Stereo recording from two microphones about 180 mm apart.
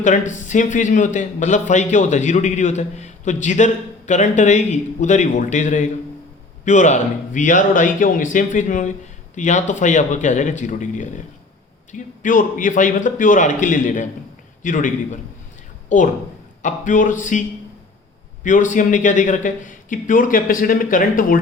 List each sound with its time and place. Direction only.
0.0 s speech: 45° left (ahead or behind)
18.4 s speech: 45° left (ahead or behind)